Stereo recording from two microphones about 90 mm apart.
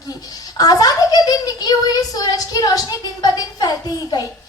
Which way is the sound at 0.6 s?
45° left (ahead or behind).